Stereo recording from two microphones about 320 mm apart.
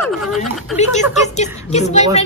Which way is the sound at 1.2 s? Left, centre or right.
Left.